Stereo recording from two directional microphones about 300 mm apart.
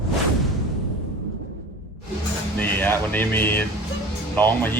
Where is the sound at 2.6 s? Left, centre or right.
Centre.